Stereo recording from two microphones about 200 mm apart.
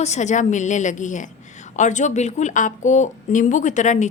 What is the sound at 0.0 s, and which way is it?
A woman's voice, 35° left (ahead or behind).